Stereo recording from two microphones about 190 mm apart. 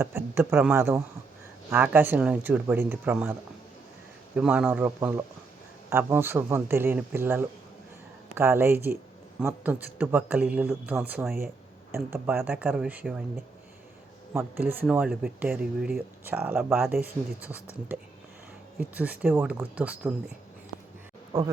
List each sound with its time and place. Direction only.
0.0 s speech: 10° right (ahead or behind)
4.4 s speech: 10° right (ahead or behind)
18.8 s speech: 10° right (ahead or behind)
21.3 s speech: 20° right (ahead or behind)